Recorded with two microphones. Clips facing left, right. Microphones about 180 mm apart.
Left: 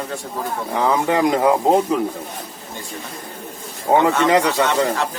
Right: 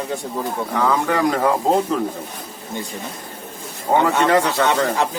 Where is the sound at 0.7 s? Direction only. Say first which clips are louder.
Left 2 dB; 20° left (ahead or behind).